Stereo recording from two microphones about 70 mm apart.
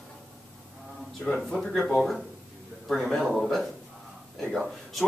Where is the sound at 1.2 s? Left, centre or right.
Centre.